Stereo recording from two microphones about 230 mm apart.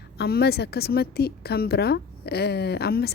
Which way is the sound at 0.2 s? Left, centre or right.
Left.